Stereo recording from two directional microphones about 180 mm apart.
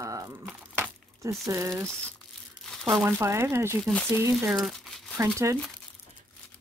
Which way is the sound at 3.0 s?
15° right (ahead or behind).